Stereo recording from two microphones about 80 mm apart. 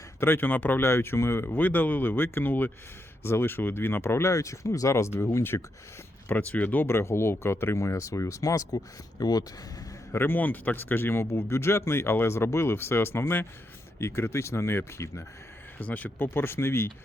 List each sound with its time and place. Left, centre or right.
0.2 s speech: left
0.8 s speech: left
10.1 s speech: left
15.8 s speech: centre